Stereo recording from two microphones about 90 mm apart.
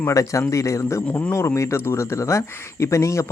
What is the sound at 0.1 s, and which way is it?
A man's voice, 35° left (ahead or behind).